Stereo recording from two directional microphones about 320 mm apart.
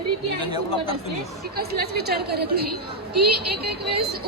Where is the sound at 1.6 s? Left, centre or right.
Right.